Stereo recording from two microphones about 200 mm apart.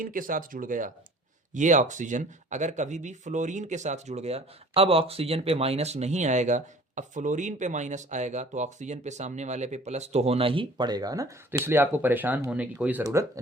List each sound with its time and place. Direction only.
0.0 s speech: 45° right (ahead or behind); by 13.4 s 15° right (ahead or behind)